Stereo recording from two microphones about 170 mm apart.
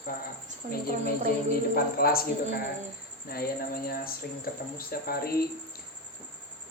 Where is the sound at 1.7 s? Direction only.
60° left (ahead or behind).